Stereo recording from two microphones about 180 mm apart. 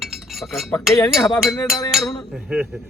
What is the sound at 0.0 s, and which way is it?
Chink, centre (ahead or behind).